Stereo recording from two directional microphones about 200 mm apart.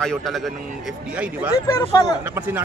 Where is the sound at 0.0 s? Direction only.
Centre (ahead or behind).